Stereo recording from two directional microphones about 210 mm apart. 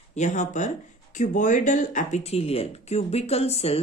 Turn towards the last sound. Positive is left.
turn(degrees=30)  # may be behind; listen again after turning